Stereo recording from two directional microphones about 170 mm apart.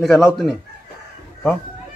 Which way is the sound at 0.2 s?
5° right (ahead or behind).